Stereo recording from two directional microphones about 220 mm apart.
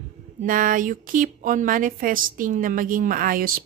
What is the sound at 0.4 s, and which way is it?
Speech, 40° right (ahead or behind).